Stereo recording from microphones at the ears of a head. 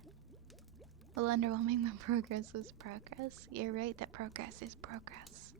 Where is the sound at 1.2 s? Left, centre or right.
Right.